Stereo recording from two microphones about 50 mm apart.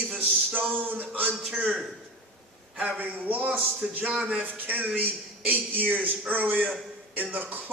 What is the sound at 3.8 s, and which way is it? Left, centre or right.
Speech, centre.